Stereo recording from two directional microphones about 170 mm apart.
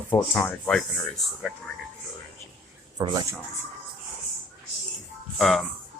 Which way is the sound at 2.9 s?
25° right (ahead or behind).